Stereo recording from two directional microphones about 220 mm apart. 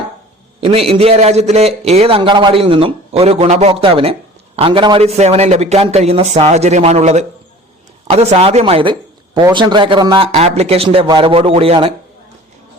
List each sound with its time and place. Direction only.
0.6 s a man's voice: 25° right (ahead or behind)